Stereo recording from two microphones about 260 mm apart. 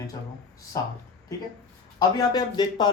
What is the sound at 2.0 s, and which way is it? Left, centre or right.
Speech, centre.